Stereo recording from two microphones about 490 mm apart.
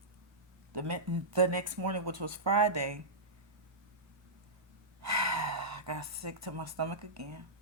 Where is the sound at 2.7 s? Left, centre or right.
Right.